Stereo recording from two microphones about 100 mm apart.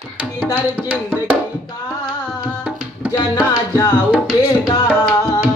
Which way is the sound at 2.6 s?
15° right (ahead or behind).